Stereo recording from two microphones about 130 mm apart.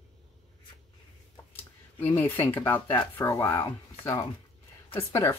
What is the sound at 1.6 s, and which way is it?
A woman's voice, 15° left (ahead or behind).